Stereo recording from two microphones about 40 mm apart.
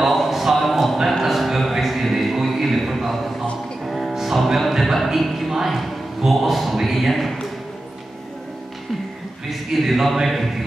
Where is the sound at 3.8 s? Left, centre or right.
Centre.